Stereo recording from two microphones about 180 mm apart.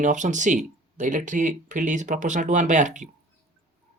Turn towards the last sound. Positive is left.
turn(degrees=-45)  # may be behind; listen again after turning